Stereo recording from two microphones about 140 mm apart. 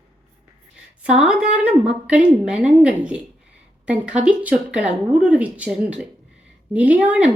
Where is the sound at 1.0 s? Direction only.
5° right (ahead or behind).